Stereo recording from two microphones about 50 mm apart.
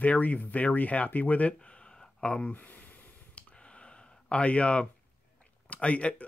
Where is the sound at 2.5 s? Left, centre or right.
Left.